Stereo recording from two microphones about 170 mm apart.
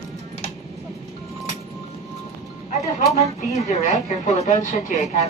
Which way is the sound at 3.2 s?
40° left (ahead or behind).